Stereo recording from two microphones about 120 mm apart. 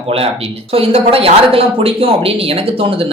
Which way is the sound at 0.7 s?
50° right (ahead or behind).